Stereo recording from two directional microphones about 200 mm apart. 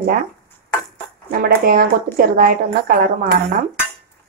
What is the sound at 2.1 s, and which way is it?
Speech, 45° right (ahead or behind).